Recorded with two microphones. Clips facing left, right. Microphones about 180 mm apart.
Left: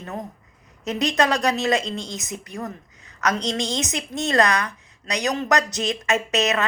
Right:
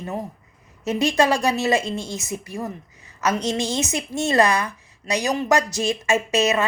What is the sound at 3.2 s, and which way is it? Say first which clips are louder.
A woman's voice: right 2 dB; 5° right (ahead or behind).